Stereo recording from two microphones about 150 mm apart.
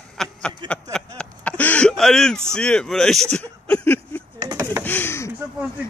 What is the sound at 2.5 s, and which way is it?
Speech, 5° left (ahead or behind).